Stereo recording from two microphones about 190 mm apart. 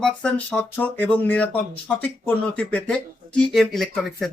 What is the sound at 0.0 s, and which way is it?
Speech, 5° left (ahead or behind).